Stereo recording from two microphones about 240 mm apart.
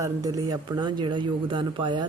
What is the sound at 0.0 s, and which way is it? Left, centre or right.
A man's voice, centre.